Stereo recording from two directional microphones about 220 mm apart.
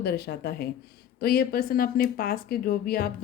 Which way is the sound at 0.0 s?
45° left (ahead or behind).